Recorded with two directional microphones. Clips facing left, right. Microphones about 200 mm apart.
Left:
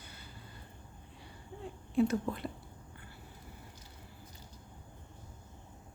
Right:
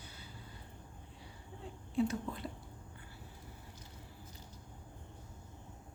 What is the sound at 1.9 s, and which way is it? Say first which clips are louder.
Whispering: left 5 dB; 60° left (ahead or behind).